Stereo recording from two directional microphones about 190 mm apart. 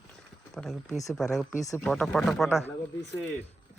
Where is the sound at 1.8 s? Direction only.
5° left (ahead or behind).